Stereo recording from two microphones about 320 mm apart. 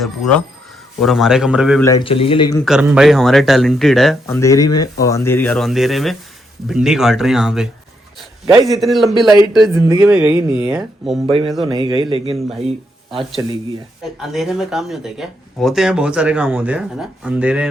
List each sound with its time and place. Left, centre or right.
0.0 s speech: centre
1.8 s speech: centre
2.6 s speech: centre
11.3 s a man's voice: centre
13.1 s speech: centre